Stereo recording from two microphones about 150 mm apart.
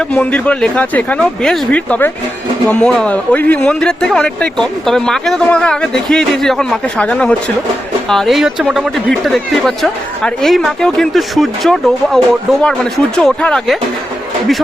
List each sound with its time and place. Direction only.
0.0 s speech: 10° left (ahead or behind)